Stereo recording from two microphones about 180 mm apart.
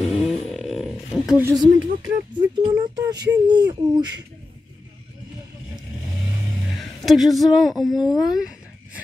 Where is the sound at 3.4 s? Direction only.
25° right (ahead or behind).